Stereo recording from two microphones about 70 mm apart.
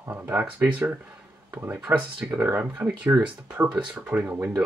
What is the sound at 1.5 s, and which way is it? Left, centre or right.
Speech, right.